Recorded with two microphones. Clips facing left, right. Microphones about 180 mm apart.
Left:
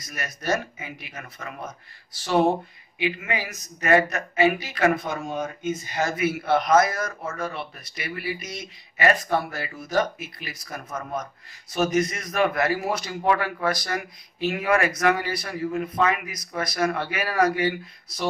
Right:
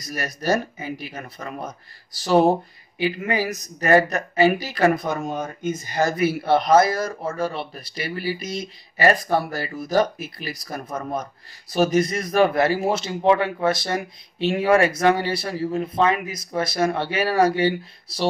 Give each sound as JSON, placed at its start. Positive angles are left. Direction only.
{"t": 0.0, "sound": "speech", "side_deg": -35}